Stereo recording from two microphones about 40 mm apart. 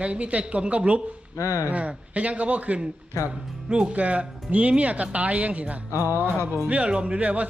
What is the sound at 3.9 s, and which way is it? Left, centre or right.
Speech, right.